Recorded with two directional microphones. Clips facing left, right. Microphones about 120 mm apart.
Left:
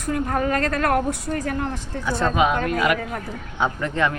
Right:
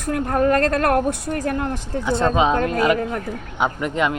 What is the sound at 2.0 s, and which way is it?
Speech, 25° right (ahead or behind).